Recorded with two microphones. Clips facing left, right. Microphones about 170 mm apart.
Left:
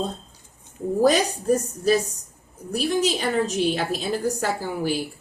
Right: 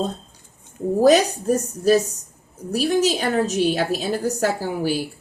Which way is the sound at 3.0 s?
45° right (ahead or behind).